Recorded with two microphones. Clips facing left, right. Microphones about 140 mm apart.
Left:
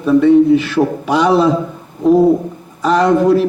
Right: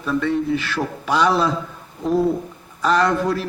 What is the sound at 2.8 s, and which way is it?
Speech, 10° left (ahead or behind).